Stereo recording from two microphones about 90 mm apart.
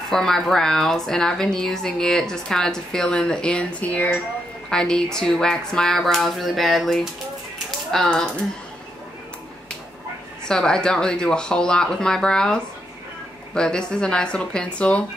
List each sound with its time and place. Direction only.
0.1 s a woman's voice: 5° left (ahead or behind)
7.5 s a sound: 5° left (ahead or behind)
10.5 s speech: 10° left (ahead or behind)
13.6 s speech: 10° left (ahead or behind)